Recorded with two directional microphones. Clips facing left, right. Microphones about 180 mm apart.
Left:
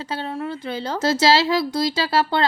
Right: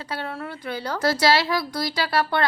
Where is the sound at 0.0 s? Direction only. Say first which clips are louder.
Left 4 dB; 25° left (ahead or behind).